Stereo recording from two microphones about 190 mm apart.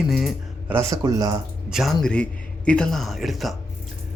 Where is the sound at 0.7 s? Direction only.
15° right (ahead or behind).